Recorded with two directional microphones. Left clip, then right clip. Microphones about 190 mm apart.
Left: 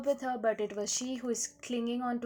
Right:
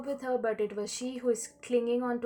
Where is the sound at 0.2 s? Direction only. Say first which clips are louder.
Right 1 dB; 40° left (ahead or behind).